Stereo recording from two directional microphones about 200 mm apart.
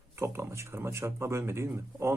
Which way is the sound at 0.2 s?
15° right (ahead or behind).